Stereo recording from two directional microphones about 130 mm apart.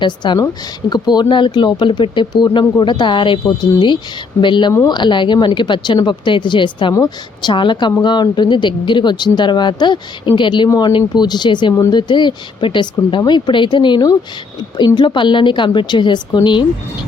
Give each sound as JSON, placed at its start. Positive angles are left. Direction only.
{"t": 0.0, "sound": "speech", "side_deg": 35}
{"t": 6.9, "sound": "a woman's voice", "side_deg": 25}
{"t": 7.5, "sound": "speech", "side_deg": 40}